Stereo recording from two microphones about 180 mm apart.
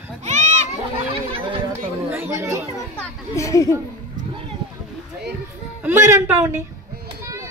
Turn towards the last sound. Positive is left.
turn(degrees=-15)  # may be behind; listen again after turning